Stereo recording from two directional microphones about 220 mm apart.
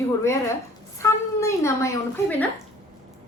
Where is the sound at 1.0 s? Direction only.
15° left (ahead or behind).